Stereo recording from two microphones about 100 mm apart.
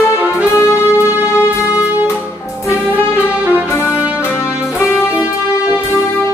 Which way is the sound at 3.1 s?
15° right (ahead or behind).